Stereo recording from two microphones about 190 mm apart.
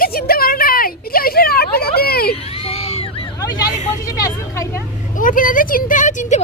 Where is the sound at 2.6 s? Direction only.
30° left (ahead or behind).